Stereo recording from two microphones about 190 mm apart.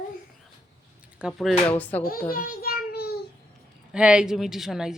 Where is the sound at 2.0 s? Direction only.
50° left (ahead or behind).